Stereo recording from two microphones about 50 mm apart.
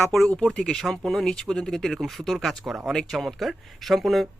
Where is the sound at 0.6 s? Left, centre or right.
Centre.